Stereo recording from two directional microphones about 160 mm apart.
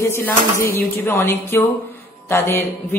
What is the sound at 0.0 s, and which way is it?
A woman's voice, 15° left (ahead or behind).